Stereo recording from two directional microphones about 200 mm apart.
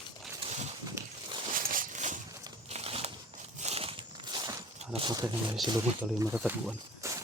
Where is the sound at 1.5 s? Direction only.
45° right (ahead or behind); by 4.6 s 20° right (ahead or behind).